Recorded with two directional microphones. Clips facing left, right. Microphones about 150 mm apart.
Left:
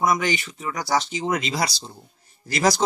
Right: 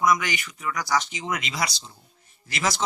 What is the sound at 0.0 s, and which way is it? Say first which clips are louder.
Speech: left 1 dB; 30° left (ahead or behind).